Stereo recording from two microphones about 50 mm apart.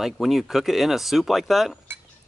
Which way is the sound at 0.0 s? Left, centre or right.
Centre.